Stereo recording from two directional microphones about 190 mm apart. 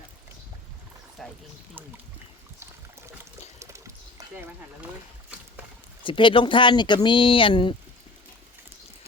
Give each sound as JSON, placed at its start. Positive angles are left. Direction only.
{"t": 1.2, "sound": "a sound", "side_deg": 0}
{"t": 3.6, "sound": "water", "side_deg": -15}
{"t": 6.0, "sound": "speech", "side_deg": 25}